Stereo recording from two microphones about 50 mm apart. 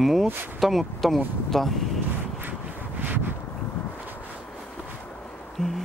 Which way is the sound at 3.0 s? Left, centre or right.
Right.